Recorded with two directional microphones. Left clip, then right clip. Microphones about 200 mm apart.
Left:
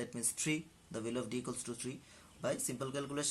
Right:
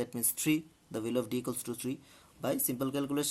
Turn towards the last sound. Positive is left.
turn(degrees=-50)  # may be behind; listen again after turning